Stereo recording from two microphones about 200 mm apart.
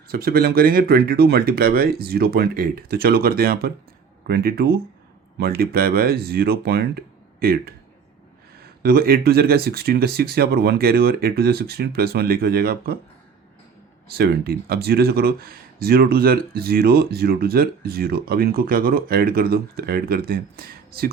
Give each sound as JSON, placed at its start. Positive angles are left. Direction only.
{"t": 0.1, "sound": "speech", "side_deg": -50}
{"t": 14.1, "sound": "speech", "side_deg": -50}